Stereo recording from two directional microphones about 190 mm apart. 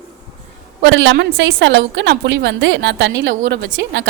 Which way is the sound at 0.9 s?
75° right (ahead or behind).